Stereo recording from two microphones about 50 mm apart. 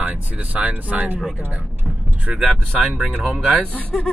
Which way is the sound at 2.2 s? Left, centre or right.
Right.